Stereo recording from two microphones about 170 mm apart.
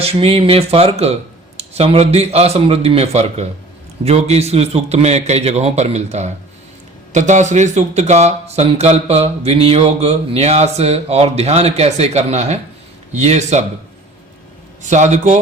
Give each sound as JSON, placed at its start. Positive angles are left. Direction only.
{"t": 0.0, "sound": "speech", "side_deg": -35}
{"t": 14.8, "sound": "a man's voice", "side_deg": -45}